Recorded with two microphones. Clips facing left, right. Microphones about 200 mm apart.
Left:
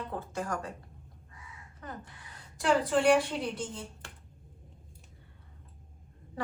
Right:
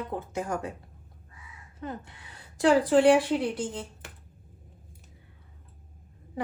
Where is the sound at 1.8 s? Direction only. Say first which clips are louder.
Right 7 dB; 25° right (ahead or behind).